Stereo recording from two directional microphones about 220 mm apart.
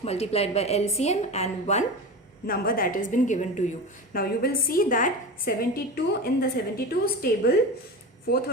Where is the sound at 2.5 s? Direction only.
40° left (ahead or behind).